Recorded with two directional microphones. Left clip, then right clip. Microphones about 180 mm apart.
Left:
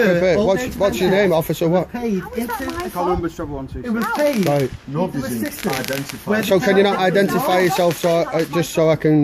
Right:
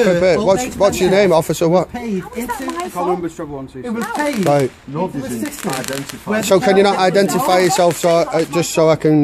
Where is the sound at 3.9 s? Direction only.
60° right (ahead or behind).